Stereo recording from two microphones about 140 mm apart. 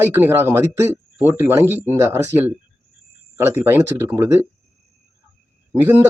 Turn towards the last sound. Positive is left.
turn(degrees=-15)  # may be behind; listen again after turning